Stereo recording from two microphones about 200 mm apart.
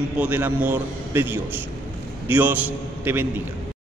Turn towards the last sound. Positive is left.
turn(degrees=-10)  # may be behind; listen again after turning